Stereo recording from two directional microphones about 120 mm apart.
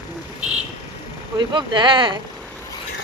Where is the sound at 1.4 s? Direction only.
40° right (ahead or behind).